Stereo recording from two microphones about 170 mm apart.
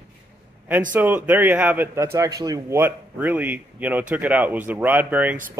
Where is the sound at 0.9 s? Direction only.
10° right (ahead or behind).